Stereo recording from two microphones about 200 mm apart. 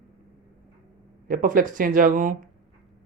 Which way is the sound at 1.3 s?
45° right (ahead or behind).